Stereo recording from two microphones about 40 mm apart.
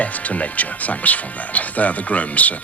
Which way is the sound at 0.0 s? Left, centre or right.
Left.